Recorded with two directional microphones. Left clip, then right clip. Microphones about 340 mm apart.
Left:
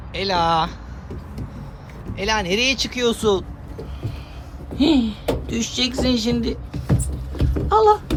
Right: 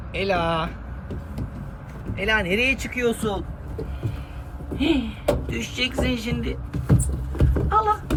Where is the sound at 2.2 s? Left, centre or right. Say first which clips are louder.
Left 1 dB; centre.